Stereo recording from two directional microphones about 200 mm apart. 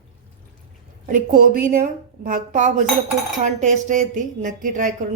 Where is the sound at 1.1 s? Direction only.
45° right (ahead or behind).